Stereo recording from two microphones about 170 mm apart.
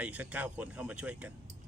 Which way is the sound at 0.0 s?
5° right (ahead or behind).